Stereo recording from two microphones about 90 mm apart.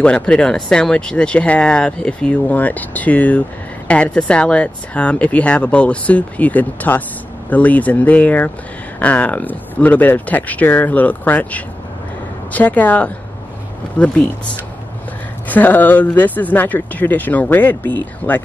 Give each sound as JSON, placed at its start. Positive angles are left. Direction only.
{"t": 0.0, "sound": "speech", "side_deg": 10}
{"t": 15.4, "sound": "speech", "side_deg": 20}